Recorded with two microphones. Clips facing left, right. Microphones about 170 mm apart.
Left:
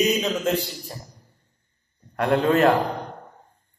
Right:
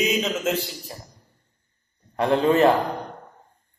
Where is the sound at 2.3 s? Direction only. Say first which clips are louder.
Right 1 dB; 10° right (ahead or behind).